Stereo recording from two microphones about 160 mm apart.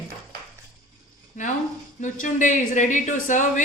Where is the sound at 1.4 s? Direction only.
55° left (ahead or behind).